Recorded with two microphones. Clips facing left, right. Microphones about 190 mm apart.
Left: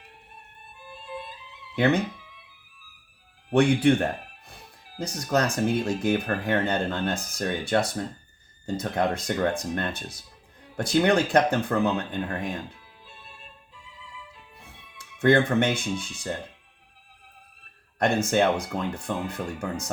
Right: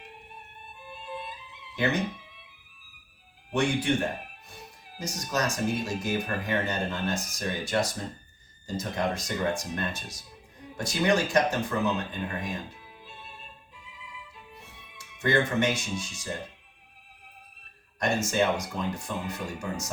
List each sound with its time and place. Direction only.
1.7 s speech: 60° left (ahead or behind)
3.5 s speech: 60° left (ahead or behind)
14.9 s speech: 55° left (ahead or behind)
18.0 s speech: 60° left (ahead or behind)